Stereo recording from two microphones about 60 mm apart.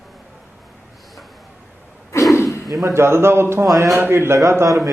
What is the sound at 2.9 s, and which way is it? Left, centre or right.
A man's voice, right.